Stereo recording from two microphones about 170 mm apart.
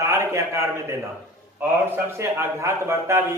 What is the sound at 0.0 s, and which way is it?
A man's voice, 15° right (ahead or behind).